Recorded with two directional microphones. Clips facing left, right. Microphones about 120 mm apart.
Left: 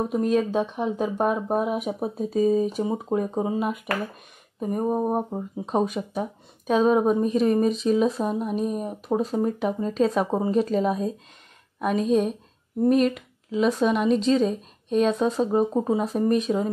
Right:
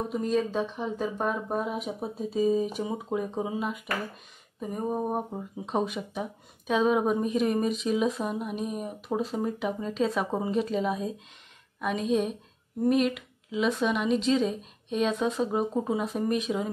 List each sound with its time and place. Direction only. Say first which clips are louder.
0.1 s speech: left 3 dB; 60° left (ahead or behind)
4.9 s speech: left 5 dB; 35° left (ahead or behind)